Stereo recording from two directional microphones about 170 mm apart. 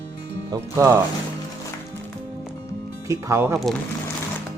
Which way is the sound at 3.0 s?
20° right (ahead or behind).